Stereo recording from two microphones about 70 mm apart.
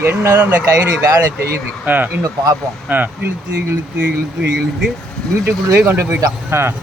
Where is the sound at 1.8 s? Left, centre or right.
Right.